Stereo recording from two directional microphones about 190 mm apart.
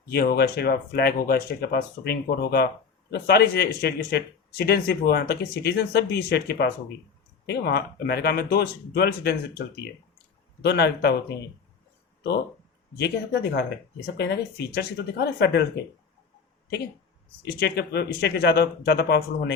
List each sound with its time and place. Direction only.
0.1 s speech: 55° left (ahead or behind)
13.0 s speech: 60° left (ahead or behind)
17.4 s speech: 60° left (ahead or behind)